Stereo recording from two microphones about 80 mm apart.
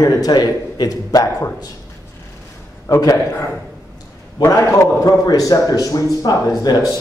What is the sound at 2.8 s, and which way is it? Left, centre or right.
Speech, left.